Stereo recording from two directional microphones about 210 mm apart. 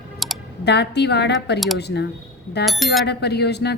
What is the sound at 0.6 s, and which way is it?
Speech, 55° left (ahead or behind).